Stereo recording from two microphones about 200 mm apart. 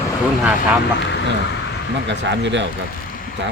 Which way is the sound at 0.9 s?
60° left (ahead or behind).